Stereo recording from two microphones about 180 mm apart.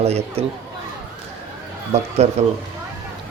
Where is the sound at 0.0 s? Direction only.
35° right (ahead or behind).